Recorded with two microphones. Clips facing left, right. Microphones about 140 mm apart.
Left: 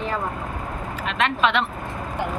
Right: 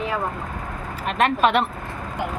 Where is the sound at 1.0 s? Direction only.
45° right (ahead or behind).